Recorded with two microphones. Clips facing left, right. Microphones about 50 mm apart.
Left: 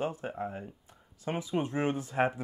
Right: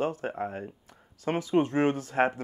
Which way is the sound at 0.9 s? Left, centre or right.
Right.